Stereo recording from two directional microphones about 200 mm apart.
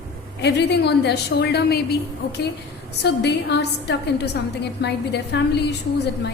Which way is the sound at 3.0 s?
55° left (ahead or behind).